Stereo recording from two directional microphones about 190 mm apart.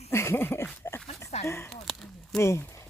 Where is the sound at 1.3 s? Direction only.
35° left (ahead or behind).